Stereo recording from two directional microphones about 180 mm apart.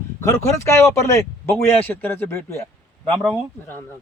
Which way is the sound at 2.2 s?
15° left (ahead or behind).